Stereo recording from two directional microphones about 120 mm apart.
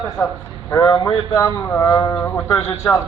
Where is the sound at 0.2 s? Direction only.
25° left (ahead or behind).